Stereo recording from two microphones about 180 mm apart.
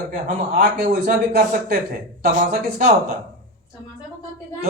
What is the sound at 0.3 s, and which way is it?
A man's voice, 55° right (ahead or behind).